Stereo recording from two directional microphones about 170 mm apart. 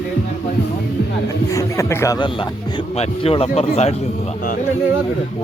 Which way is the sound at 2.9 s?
35° left (ahead or behind).